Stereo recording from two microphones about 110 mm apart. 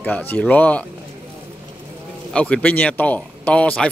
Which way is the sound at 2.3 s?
10° left (ahead or behind).